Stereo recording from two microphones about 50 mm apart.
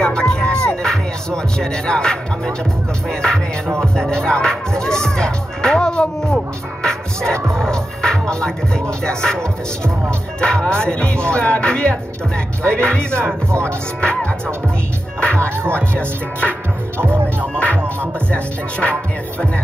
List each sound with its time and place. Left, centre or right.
0.0 s music: centre
3.1 s speech: centre
7.5 s music: centre
9.0 s speech: centre
13.5 s music: right
15.1 s speech: left
15.6 s music: right
16.0 s speech: left
18.3 s speech: left